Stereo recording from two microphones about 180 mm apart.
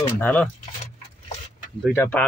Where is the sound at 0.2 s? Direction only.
10° left (ahead or behind).